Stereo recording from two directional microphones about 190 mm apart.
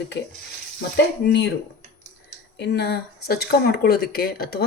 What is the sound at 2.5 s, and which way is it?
Speech, 60° left (ahead or behind).